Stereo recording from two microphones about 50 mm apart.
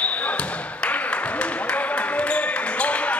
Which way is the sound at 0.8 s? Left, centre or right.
Left.